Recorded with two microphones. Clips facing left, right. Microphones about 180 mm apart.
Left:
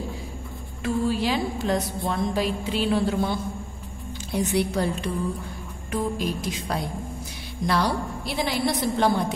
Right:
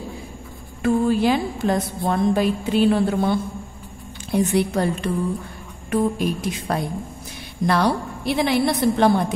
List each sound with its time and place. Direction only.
0.8 s a woman's voice: 50° right (ahead or behind)